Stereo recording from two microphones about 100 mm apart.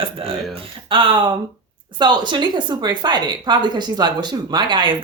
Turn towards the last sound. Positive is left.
turn(degrees=-50)  # may be behind; listen again after turning